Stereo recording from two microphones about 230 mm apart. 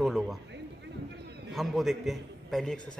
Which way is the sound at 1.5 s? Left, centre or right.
Centre.